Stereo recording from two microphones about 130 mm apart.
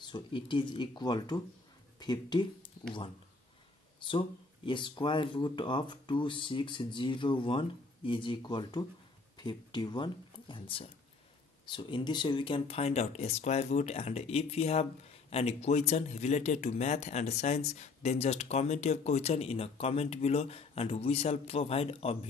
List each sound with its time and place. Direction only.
0.0 s speech: 40° left (ahead or behind)
4.0 s speech: 40° left (ahead or behind)